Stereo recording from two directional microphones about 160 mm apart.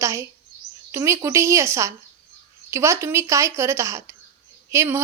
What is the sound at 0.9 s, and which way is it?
A woman's voice, 15° right (ahead or behind).